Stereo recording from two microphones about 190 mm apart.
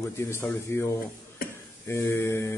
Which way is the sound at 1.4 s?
50° left (ahead or behind).